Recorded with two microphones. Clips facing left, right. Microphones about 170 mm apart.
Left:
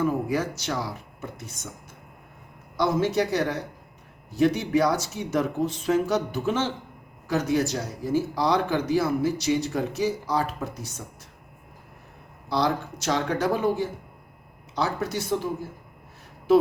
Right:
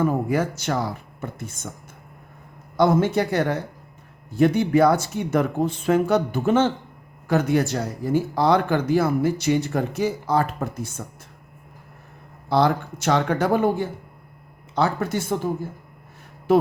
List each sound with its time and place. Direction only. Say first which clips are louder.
0.0 s speech: right 3 dB; 55° right (ahead or behind)
2.7 s speech: right 4 dB; 55° right (ahead or behind)
12.5 s speech: right 5 dB; 55° right (ahead or behind)